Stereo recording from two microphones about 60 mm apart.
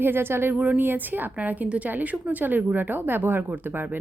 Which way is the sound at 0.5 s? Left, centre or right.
Right.